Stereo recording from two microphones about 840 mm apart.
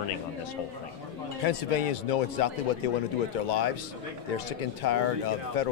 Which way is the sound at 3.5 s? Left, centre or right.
Left.